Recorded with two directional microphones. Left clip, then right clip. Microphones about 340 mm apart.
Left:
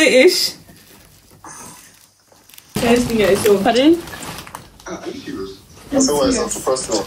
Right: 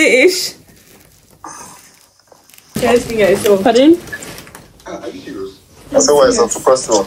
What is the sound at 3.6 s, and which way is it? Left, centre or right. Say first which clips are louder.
Speech: right 4 dB; centre.